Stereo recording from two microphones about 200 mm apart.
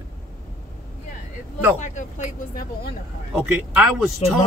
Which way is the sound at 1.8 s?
40° left (ahead or behind).